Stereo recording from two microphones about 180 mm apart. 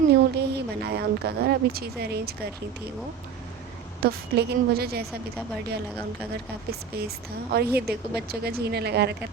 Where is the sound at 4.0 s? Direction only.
60° right (ahead or behind).